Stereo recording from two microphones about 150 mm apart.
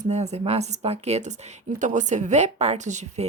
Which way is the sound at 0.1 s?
45° right (ahead or behind).